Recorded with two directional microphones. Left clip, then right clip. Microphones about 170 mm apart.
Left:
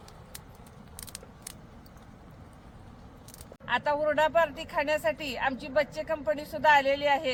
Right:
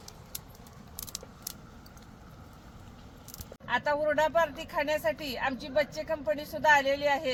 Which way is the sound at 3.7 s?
Centre (ahead or behind).